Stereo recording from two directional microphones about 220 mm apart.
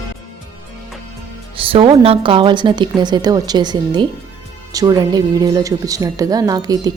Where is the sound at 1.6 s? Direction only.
25° right (ahead or behind).